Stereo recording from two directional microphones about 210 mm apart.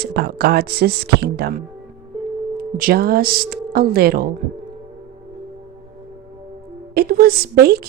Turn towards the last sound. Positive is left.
turn(degrees=-50)  # may be behind; listen again after turning